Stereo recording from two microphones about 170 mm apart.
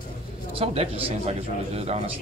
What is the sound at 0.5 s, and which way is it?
Speech, 35° right (ahead or behind).